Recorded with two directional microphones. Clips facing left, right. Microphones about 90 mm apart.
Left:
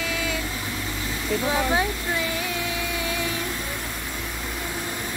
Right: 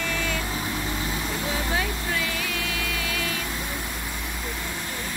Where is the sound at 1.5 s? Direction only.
25° left (ahead or behind).